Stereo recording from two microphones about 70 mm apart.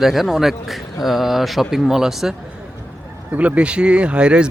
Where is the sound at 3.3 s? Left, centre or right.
Right.